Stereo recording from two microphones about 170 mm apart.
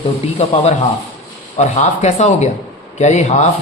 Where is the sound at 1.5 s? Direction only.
40° left (ahead or behind).